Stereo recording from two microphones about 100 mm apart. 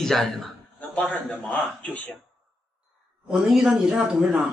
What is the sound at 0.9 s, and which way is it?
A man's voice, 15° left (ahead or behind).